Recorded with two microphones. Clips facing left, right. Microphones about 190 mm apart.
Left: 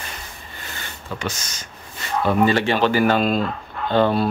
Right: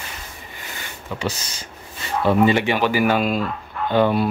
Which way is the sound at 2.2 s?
20° right (ahead or behind).